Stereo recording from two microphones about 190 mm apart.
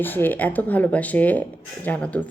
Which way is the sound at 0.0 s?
10° left (ahead or behind).